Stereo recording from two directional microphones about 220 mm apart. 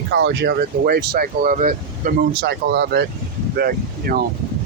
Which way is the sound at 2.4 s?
50° right (ahead or behind).